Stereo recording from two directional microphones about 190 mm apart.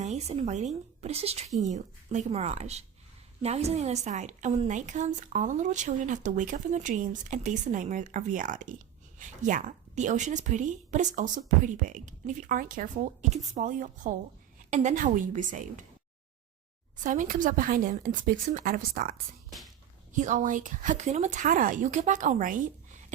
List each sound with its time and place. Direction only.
0.0 s a woman's voice: 35° right (ahead or behind)
17.0 s a woman's voice: 45° right (ahead or behind)
19.1 s speech: centre (ahead or behind)
20.1 s a woman's voice: 40° right (ahead or behind)